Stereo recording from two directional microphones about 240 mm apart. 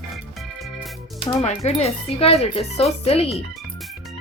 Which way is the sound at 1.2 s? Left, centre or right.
Left.